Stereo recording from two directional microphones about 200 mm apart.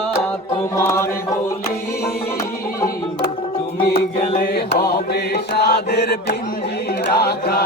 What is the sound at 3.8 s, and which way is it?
Mantra, 50° left (ahead or behind).